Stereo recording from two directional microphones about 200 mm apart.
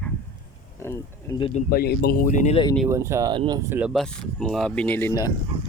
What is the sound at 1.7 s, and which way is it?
Speech, 50° left (ahead or behind).